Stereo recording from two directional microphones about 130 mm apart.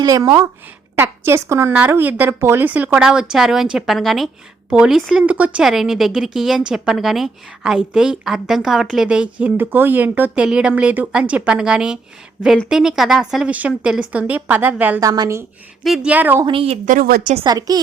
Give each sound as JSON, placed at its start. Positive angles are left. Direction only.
{"t": 0.0, "sound": "a woman's voice", "side_deg": -30}
{"t": 0.9, "sound": "a woman's voice", "side_deg": -15}
{"t": 15.0, "sound": "a woman's voice", "side_deg": -30}
{"t": 15.8, "sound": "a woman's voice", "side_deg": -5}
{"t": 16.5, "sound": "a woman's voice", "side_deg": -45}
{"t": 16.8, "sound": "speech", "side_deg": -85}
{"t": 17.4, "sound": "speech", "side_deg": -30}